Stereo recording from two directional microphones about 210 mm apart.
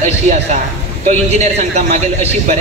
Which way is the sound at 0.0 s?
35° right (ahead or behind).